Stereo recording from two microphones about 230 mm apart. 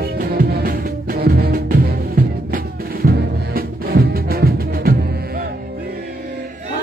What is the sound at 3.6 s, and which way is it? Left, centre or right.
Music, right.